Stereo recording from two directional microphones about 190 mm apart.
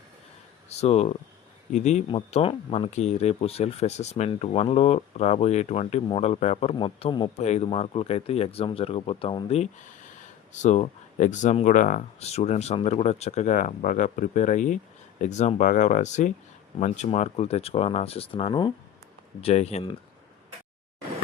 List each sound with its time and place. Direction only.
0.7 s speech: 35° left (ahead or behind)